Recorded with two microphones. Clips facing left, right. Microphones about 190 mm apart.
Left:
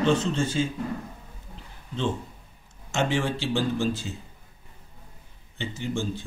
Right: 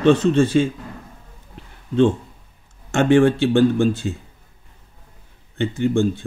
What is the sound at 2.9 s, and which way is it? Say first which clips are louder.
Speech: right 11 dB; 55° right (ahead or behind).